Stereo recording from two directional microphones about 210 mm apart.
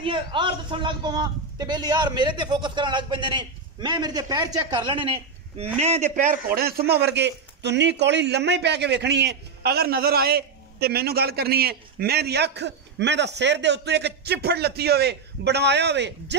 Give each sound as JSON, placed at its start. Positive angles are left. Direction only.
{"t": 0.0, "sound": "a man's voice", "side_deg": -25}
{"t": 5.8, "sound": "a man's voice", "side_deg": -30}